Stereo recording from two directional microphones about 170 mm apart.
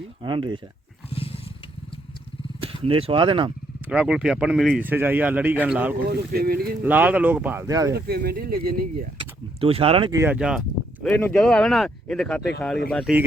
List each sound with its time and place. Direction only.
0.2 s speech: 30° right (ahead or behind)
2.6 s speech: 30° right (ahead or behind)
3.8 s speech: 5° right (ahead or behind)
6.1 s speech: 65° right (ahead or behind)
6.8 s speech: 10° right (ahead or behind)
7.9 s speech: 65° right (ahead or behind)
9.1 s speech: 35° right (ahead or behind)
10.1 s speech: 15° right (ahead or behind)
10.3 s speech: 5° right (ahead or behind)
11.0 s speech: 5° left (ahead or behind)